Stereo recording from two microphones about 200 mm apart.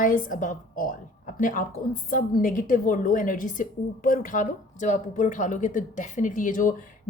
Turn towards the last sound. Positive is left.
turn(degrees=40)  # may be behind; listen again after turning